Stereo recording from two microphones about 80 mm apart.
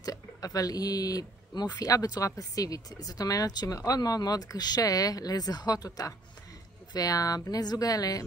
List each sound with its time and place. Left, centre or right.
0.0 s speech: left